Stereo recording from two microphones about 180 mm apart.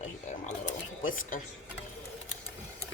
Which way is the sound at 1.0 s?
50° left (ahead or behind).